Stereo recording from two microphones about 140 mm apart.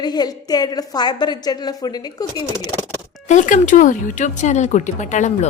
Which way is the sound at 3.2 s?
65° left (ahead or behind).